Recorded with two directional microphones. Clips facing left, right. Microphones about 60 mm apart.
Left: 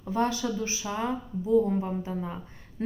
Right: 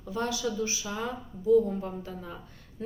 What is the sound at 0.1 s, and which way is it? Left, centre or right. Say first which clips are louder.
A woman's voice: left 4 dB; left.